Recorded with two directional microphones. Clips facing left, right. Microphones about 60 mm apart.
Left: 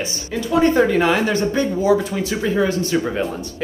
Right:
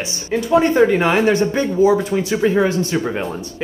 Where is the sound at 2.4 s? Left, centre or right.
Right.